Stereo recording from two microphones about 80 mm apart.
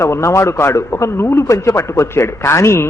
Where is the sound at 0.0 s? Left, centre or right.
Left.